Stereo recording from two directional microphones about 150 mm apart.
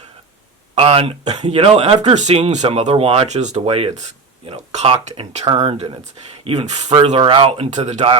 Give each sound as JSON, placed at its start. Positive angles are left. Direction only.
{"t": 0.8, "sound": "speech", "side_deg": -40}
{"t": 6.9, "sound": "speech", "side_deg": -35}